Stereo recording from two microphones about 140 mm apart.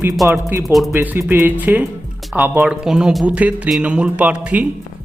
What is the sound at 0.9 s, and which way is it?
A man's voice, 15° right (ahead or behind).